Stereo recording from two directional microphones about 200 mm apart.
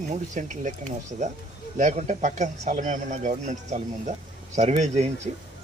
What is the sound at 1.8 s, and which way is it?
Speech, 35° right (ahead or behind).